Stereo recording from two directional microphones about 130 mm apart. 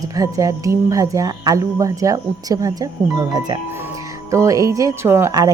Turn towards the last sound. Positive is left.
turn(degrees=-20)  # may be behind; listen again after turning